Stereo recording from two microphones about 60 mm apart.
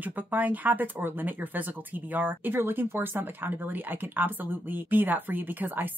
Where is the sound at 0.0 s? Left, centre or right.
Right.